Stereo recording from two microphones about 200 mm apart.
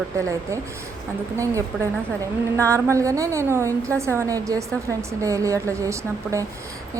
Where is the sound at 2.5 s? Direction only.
15° right (ahead or behind).